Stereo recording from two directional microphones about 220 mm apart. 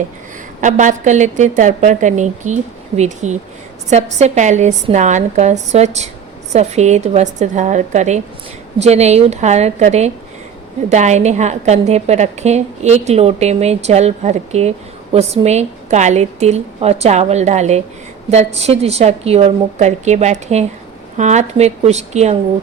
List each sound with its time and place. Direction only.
0.6 s a woman's voice: 35° right (ahead or behind)